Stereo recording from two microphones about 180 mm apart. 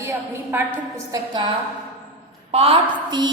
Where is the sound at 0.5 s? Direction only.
20° right (ahead or behind).